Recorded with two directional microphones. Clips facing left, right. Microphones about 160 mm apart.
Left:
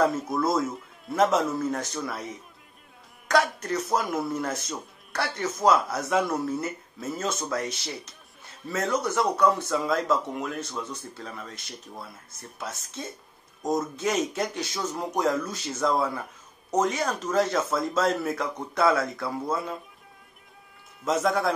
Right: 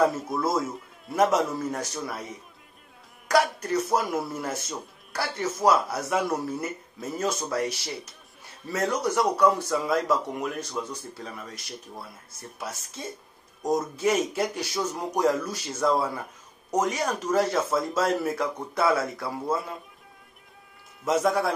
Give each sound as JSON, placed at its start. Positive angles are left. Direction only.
{"t": 0.0, "sound": "a man's voice", "side_deg": 0}
{"t": 3.3, "sound": "a man's voice", "side_deg": -10}
{"t": 8.7, "sound": "a man's voice", "side_deg": -35}
{"t": 9.0, "sound": "a man's voice", "side_deg": -10}
{"t": 21.0, "sound": "a man's voice", "side_deg": -10}